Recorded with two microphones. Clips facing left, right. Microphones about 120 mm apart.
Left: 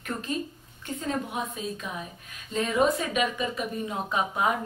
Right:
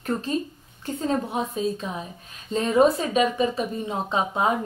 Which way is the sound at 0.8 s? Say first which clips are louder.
Right 5 dB; 30° right (ahead or behind).